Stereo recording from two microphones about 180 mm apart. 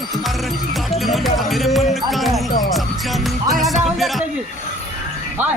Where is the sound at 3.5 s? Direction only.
Centre (ahead or behind).